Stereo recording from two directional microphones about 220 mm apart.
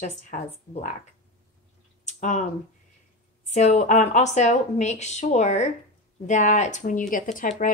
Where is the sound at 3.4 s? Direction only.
30° left (ahead or behind).